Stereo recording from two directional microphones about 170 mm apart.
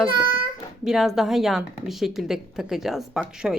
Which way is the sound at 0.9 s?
Centre (ahead or behind).